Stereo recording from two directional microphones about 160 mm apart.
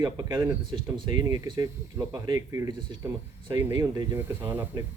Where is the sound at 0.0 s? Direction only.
25° right (ahead or behind).